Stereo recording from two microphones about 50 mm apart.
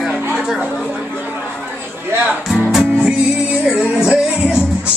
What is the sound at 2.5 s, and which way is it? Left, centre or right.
Music, centre.